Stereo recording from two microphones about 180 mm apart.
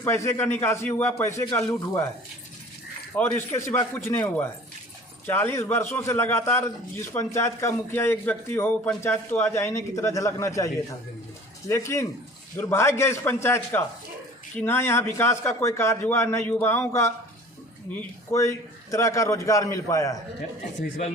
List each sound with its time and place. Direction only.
0.0 s a man's voice: 15° left (ahead or behind)
3.2 s a man's voice: 10° left (ahead or behind)
11.7 s a man's voice: 15° left (ahead or behind)